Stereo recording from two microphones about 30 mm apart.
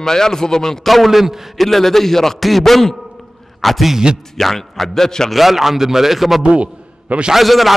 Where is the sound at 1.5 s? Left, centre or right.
Centre.